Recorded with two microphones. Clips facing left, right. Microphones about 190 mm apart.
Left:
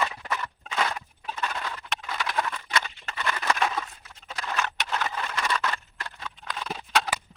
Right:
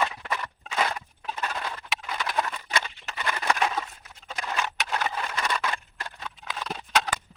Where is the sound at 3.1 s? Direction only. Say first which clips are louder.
Right 1 dB; 15° right (ahead or behind).